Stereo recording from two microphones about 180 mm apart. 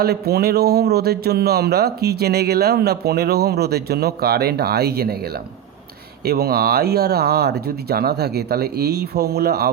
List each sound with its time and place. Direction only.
0.0 s speech: 60° right (ahead or behind)